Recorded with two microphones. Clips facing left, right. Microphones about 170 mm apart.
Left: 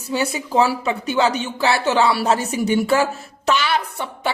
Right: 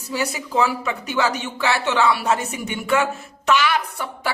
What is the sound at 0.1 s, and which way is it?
Speech, 25° left (ahead or behind).